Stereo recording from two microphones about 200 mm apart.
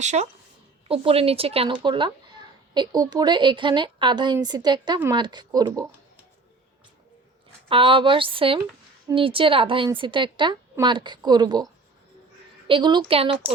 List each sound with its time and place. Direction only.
0.0 s a woman's voice: 35° right (ahead or behind); by 5.9 s 20° right (ahead or behind)
7.7 s speech: 25° right (ahead or behind)
12.6 s speech: 25° right (ahead or behind)